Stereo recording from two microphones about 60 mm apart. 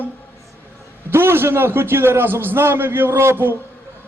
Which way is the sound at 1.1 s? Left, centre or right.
Right.